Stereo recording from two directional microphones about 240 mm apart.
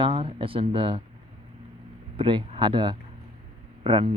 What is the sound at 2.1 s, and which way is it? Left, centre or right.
Speech, right.